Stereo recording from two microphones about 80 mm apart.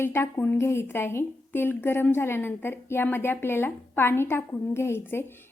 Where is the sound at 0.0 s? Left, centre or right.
Left.